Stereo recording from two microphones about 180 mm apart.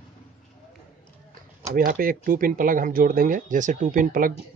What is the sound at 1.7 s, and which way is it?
Speech, 55° right (ahead or behind).